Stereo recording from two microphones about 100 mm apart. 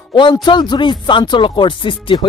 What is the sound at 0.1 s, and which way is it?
Speech, 50° left (ahead or behind).